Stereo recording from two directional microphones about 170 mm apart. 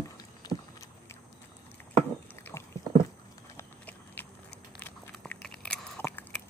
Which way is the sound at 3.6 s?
10° left (ahead or behind).